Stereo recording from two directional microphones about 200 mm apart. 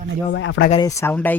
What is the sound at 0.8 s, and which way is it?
Speech, 15° left (ahead or behind).